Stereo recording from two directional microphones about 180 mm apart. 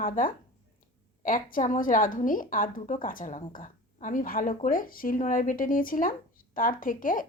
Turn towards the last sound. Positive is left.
turn(degrees=50)  # may be behind; listen again after turning